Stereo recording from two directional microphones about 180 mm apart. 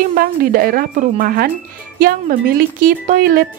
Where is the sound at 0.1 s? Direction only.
50° right (ahead or behind).